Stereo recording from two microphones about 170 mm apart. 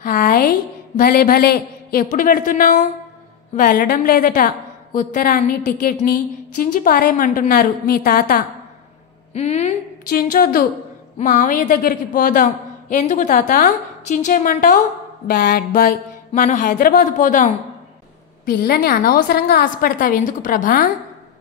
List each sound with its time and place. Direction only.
0.0 s a woman's voice: 55° left (ahead or behind)
9.3 s a woman's voice: 40° left (ahead or behind)
10.0 s a woman's voice: 60° left (ahead or behind)
18.4 s a woman's voice: 60° left (ahead or behind)